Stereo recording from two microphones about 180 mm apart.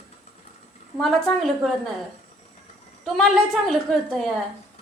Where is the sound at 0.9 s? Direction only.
5° left (ahead or behind).